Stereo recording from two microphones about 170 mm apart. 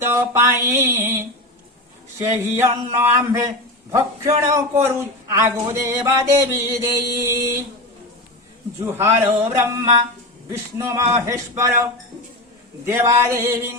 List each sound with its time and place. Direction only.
0.0 s a man's voice: 15° right (ahead or behind)
6.7 s a sound: 20° right (ahead or behind)
8.9 s a man's voice: 15° right (ahead or behind)
12.8 s a man's voice: 15° right (ahead or behind)